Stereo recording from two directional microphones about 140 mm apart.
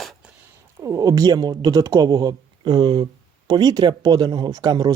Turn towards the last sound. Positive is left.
turn(degrees=-30)  # may be behind; listen again after turning